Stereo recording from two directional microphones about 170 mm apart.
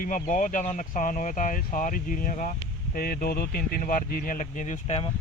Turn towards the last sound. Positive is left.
turn(degrees=40)  # may be behind; listen again after turning